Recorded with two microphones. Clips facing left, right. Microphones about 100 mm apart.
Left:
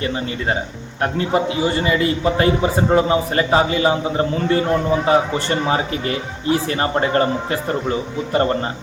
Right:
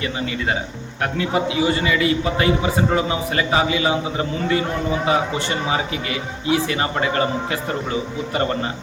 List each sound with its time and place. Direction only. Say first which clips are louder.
1.5 s a man's voice: left 1 dB; 30° left (ahead or behind)